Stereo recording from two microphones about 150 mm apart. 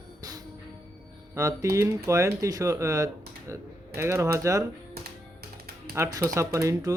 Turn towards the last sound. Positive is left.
turn(degrees=-20)  # may be behind; listen again after turning